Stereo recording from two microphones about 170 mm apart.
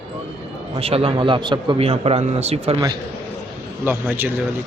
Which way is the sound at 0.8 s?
35° right (ahead or behind).